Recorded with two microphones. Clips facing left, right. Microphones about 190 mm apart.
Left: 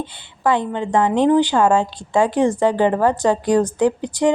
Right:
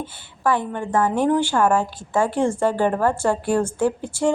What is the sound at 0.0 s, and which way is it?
A woman's voice, 20° left (ahead or behind).